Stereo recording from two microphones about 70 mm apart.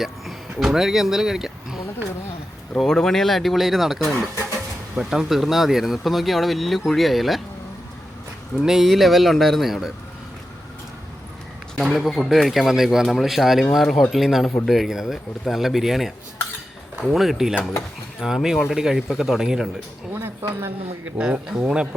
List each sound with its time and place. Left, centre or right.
0.6 s speech: centre
2.7 s speech: centre
8.6 s speech: centre
11.8 s speech: centre
13.8 s speech: centre
14.1 s speech: centre
20.5 s a woman's voice: right
21.2 s speech: centre